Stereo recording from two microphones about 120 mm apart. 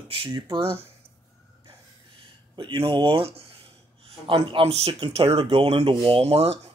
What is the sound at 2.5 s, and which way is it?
Speech, 45° right (ahead or behind).